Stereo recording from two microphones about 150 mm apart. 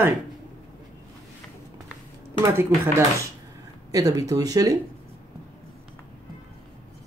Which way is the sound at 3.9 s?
20° right (ahead or behind).